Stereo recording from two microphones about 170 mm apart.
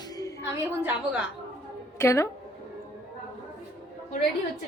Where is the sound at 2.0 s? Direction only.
15° left (ahead or behind).